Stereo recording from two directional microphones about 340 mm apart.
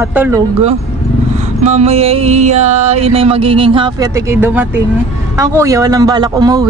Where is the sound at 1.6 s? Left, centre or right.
Centre.